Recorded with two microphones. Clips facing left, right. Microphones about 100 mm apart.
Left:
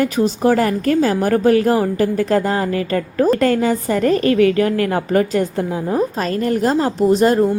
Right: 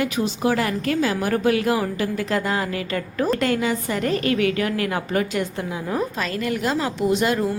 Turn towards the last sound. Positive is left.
turn(degrees=40)  # may be behind; listen again after turning